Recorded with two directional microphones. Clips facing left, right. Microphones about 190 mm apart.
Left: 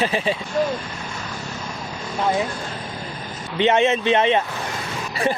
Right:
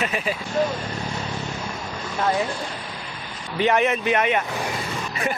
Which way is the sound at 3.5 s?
25° left (ahead or behind).